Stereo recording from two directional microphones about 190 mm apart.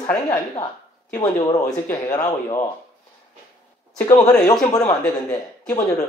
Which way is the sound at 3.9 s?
10° left (ahead or behind).